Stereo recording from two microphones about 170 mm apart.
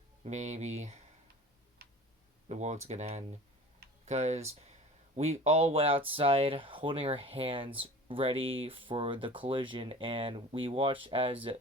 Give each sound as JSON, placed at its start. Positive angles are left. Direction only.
{"t": 0.3, "sound": "speech", "side_deg": -40}
{"t": 1.8, "sound": "tick-tock", "side_deg": -75}
{"t": 2.5, "sound": "speech", "side_deg": -40}